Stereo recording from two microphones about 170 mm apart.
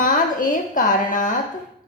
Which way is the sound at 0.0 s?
50° left (ahead or behind).